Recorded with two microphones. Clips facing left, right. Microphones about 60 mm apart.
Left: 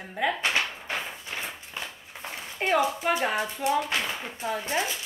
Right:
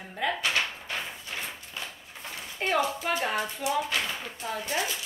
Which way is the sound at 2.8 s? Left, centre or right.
Centre.